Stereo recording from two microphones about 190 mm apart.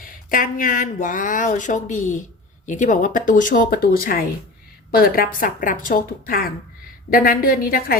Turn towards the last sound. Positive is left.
turn(degrees=50)  # may be behind; listen again after turning